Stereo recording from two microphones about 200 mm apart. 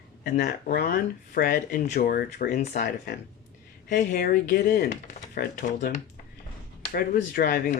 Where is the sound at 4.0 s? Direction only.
45° left (ahead or behind).